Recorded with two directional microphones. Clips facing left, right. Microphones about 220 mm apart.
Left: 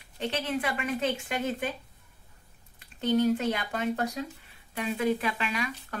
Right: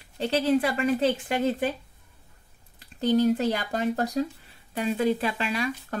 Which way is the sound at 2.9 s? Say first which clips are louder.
Right 3 dB; 35° right (ahead or behind).